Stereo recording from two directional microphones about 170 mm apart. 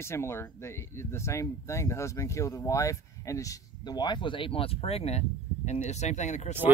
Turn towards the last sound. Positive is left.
turn(degrees=45)  # may be behind; listen again after turning